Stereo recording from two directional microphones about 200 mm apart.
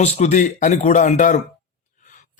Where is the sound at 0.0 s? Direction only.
35° left (ahead or behind).